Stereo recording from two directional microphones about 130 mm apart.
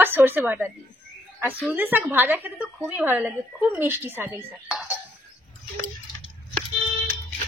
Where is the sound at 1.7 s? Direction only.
15° right (ahead or behind).